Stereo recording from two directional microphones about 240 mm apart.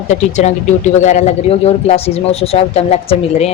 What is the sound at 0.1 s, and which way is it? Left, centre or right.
A man's voice, left.